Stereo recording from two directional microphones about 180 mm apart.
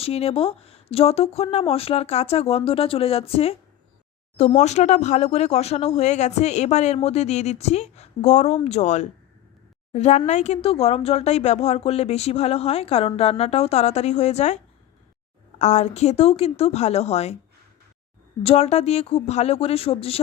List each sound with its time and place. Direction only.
0.0 s speech: 35° left (ahead or behind)
18.4 s speech: 35° left (ahead or behind)